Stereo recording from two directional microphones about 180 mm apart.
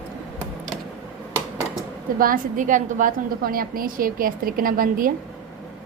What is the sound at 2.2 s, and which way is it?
A woman's voice, 50° right (ahead or behind).